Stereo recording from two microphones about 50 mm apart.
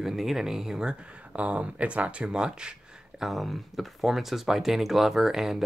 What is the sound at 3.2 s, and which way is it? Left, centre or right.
Speech, centre.